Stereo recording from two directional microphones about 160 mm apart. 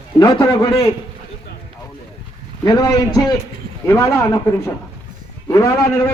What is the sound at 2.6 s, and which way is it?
A man's voice, 25° left (ahead or behind).